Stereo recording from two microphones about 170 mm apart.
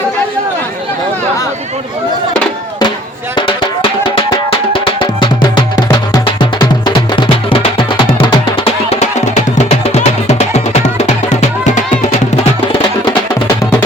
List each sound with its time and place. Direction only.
4.3 s music: 30° left (ahead or behind)